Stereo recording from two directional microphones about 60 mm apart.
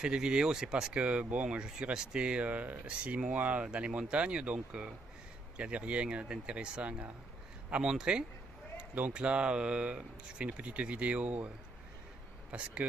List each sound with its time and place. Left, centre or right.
0.0 s speech: centre
1.0 s speech: right